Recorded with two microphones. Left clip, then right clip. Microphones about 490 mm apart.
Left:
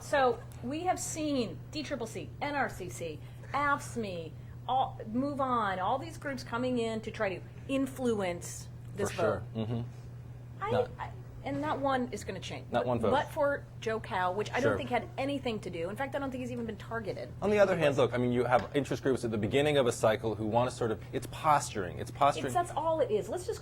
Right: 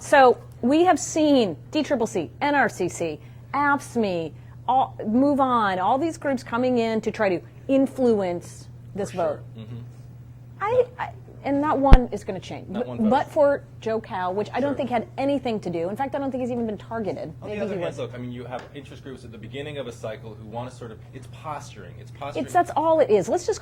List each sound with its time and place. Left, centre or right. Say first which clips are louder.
0.7 s a woman's voice: right 14 dB; right
9.6 s a man's voice: left 6 dB; left
10.6 s speech: right 10 dB; right
11.9 s a woman's voice: right 8 dB; right
17.5 s speech: left 3 dB; left
22.5 s a woman's voice: right 11 dB; right